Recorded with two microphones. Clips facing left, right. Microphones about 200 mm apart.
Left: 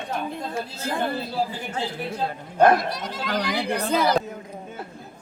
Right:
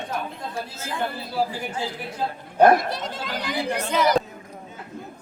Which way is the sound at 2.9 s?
25° right (ahead or behind).